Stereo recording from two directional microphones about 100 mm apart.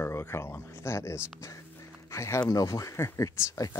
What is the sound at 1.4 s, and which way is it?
Music, 30° left (ahead or behind).